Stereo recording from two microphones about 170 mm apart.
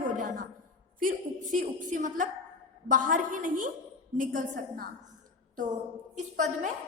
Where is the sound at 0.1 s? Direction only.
50° right (ahead or behind).